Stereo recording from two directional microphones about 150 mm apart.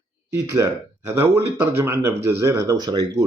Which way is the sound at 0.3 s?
20° right (ahead or behind).